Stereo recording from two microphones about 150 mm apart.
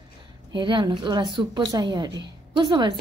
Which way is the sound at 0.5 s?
30° right (ahead or behind).